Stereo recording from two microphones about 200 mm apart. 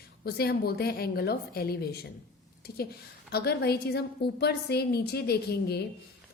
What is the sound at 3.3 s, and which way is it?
A woman's voice, 55° left (ahead or behind).